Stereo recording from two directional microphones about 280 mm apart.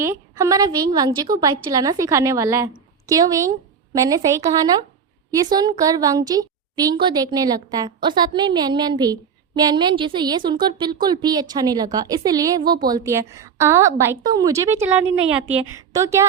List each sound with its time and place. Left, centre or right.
0.0 s a woman's voice: centre